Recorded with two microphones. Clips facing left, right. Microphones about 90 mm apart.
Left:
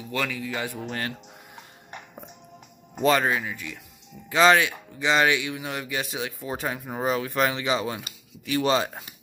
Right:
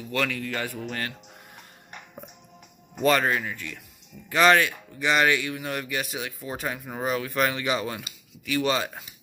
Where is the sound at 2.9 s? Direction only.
20° left (ahead or behind).